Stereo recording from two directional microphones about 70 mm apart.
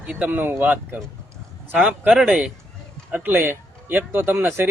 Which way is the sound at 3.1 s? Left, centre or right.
Right.